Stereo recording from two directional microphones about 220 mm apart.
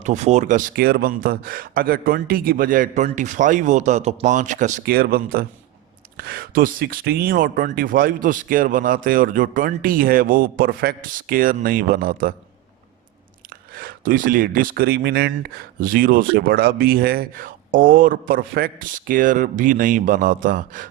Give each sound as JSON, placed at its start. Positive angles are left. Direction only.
{"t": 0.0, "sound": "speech", "side_deg": -30}
{"t": 13.7, "sound": "speech", "side_deg": -40}